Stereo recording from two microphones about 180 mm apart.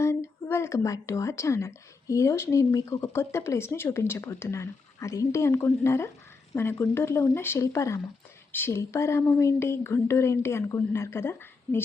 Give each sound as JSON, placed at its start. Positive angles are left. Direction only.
{"t": 0.0, "sound": "a woman's voice", "side_deg": 15}